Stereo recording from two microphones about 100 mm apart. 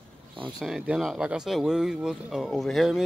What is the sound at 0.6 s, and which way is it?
Speech, 5° right (ahead or behind).